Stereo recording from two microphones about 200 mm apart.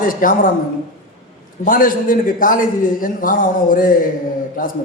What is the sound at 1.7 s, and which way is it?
A man's voice, 45° left (ahead or behind).